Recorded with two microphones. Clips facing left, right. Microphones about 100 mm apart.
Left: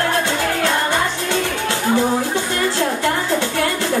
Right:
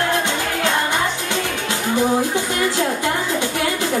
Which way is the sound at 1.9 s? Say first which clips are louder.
Right 4 dB; 15° right (ahead or behind).